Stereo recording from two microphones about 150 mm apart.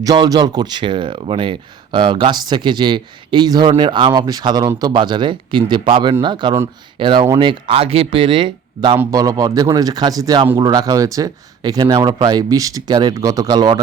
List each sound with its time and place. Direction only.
0.0 s speech: 25° right (ahead or behind)
9.0 s speech: 20° right (ahead or behind)